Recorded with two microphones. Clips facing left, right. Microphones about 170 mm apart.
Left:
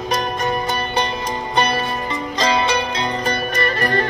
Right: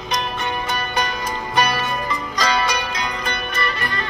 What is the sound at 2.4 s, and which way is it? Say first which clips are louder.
Music: left 3 dB; 25° left (ahead or behind).